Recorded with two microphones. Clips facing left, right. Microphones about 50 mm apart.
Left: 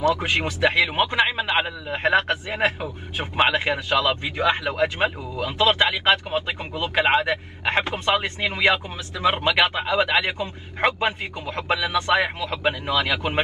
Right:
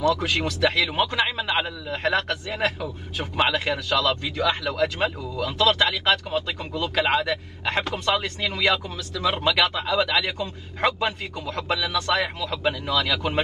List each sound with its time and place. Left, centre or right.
0.0 s a man's voice: left